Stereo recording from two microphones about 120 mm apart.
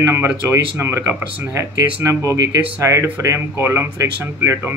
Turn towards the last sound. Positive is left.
turn(degrees=-20)  # may be behind; listen again after turning